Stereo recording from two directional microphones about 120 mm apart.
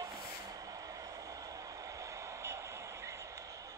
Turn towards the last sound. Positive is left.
turn(degrees=-25)  # may be behind; listen again after turning